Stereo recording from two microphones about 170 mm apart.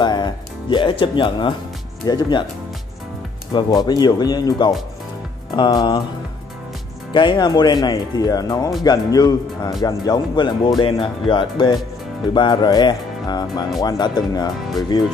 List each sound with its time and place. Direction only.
0.0 s speech: 25° left (ahead or behind)
3.5 s speech: 25° left (ahead or behind)
7.1 s speech: 25° left (ahead or behind)